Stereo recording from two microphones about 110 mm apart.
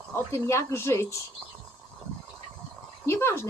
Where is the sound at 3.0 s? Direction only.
20° left (ahead or behind).